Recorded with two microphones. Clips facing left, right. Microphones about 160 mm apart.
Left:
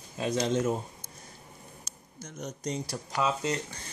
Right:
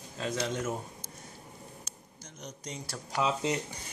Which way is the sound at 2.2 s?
50° left (ahead or behind).